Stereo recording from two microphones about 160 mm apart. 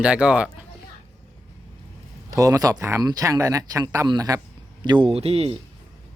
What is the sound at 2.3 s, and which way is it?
Speech, 20° right (ahead or behind).